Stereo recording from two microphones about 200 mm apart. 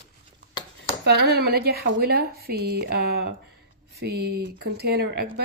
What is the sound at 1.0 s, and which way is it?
Speech, 55° right (ahead or behind).